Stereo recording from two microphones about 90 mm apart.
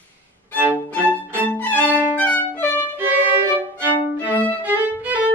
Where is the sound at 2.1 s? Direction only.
20° left (ahead or behind).